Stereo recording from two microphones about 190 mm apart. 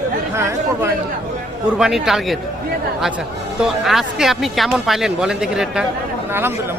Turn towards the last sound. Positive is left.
turn(degrees=-10)  # may be behind; listen again after turning